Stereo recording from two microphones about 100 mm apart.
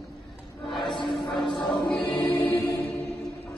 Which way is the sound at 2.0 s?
55° left (ahead or behind).